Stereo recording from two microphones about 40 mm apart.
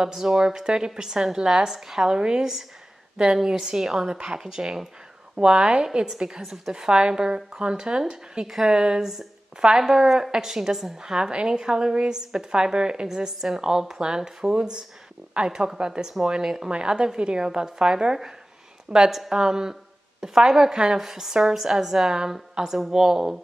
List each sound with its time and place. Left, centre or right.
0.0 s a woman's voice: centre